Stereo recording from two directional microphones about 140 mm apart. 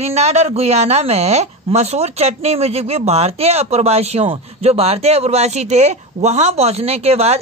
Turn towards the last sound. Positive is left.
turn(degrees=-50)  # may be behind; listen again after turning